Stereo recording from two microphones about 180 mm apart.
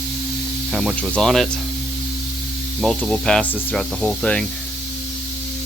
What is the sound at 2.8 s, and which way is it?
Speech, centre (ahead or behind).